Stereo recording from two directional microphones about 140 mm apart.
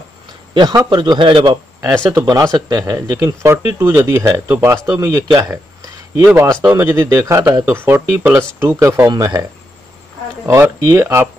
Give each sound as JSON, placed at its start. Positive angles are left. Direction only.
{"t": 0.6, "sound": "a man's voice", "side_deg": -30}